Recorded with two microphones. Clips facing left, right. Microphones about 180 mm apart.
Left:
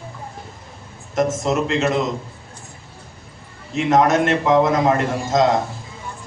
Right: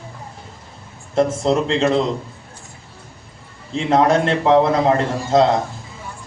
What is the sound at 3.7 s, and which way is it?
A man's voice, 30° right (ahead or behind).